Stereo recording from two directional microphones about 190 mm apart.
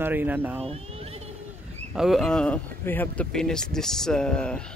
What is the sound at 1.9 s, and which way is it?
Speech, centre (ahead or behind).